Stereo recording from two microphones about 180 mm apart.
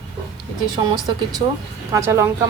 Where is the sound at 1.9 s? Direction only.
15° right (ahead or behind).